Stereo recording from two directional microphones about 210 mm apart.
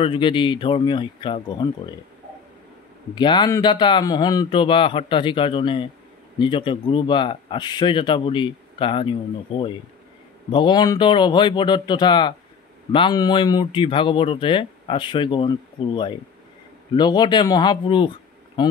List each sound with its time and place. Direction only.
0.0 s speech: 25° left (ahead or behind)
3.2 s speech: 20° left (ahead or behind)